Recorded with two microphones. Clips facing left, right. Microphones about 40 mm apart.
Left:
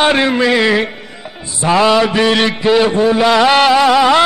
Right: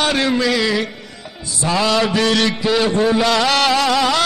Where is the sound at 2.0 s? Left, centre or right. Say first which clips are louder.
Left 4 dB; centre.